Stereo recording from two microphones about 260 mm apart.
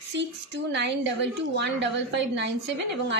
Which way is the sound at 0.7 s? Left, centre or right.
Right.